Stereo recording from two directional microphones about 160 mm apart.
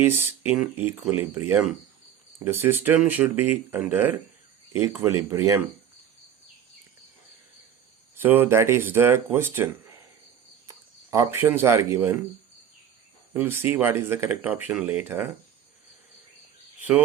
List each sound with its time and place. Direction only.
0.0 s speech: 15° right (ahead or behind)
8.1 s speech: 10° right (ahead or behind)
10.7 s speech: 20° right (ahead or behind)
13.3 s speech: 15° right (ahead or behind)